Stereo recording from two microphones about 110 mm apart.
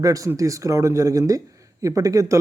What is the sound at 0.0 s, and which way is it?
Speech, 30° right (ahead or behind).